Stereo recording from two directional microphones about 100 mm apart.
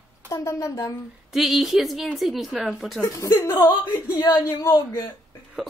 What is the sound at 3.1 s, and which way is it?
Speech, 30° left (ahead or behind).